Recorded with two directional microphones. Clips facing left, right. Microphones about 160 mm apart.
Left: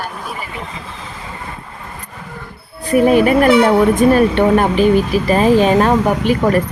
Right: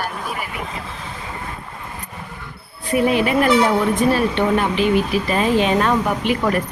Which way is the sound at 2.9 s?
45° left (ahead or behind).